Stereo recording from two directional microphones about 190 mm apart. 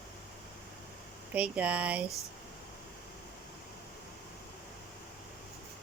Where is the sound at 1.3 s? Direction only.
5° right (ahead or behind).